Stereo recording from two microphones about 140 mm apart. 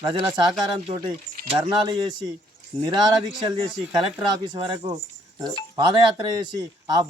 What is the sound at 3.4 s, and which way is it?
Speech, 35° right (ahead or behind).